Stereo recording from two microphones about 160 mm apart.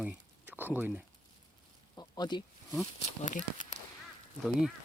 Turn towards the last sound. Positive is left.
turn(degrees=-5)  # may be behind; listen again after turning